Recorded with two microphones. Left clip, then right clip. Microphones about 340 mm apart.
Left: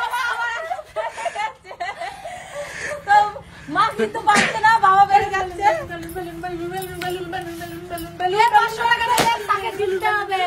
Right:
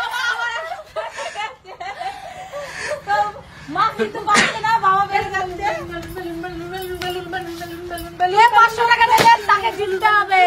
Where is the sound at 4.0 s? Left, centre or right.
Centre.